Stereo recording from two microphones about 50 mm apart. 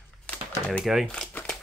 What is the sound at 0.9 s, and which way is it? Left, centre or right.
Speech, centre.